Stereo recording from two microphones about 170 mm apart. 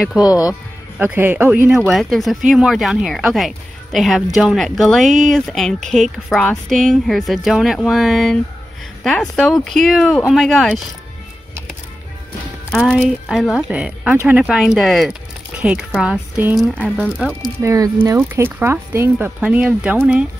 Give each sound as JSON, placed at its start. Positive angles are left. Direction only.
{"t": 0.2, "sound": "speech", "side_deg": 20}
{"t": 0.9, "sound": "speech", "side_deg": -10}
{"t": 12.7, "sound": "speech", "side_deg": 0}
{"t": 17.0, "sound": "speech", "side_deg": 5}
{"t": 17.4, "sound": "speech", "side_deg": -20}